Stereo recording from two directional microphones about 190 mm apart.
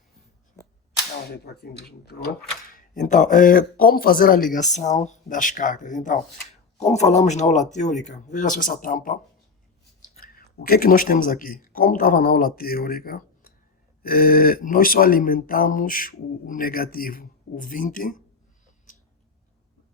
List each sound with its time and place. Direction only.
1.5 s speech: 55° left (ahead or behind)
2.7 s a man's voice: 40° left (ahead or behind)